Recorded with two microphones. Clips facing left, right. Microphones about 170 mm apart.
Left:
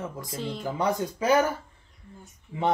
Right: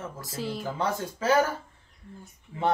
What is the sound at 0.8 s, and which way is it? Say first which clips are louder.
Speech: left 4 dB; 15° left (ahead or behind).